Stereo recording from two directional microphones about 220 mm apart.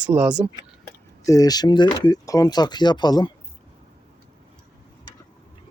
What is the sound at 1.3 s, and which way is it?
Speech, 15° left (ahead or behind).